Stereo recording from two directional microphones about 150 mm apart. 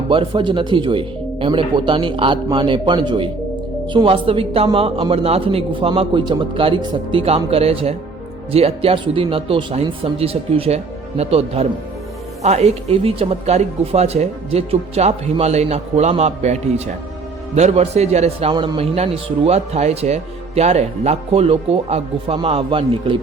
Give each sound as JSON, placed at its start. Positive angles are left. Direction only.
{"t": 0.1, "sound": "a man's voice", "side_deg": -35}